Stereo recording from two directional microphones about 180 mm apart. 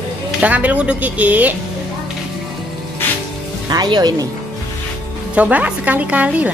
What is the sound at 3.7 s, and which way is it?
Speech, 20° right (ahead or behind).